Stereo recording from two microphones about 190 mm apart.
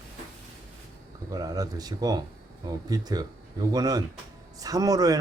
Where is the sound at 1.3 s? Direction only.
20° right (ahead or behind).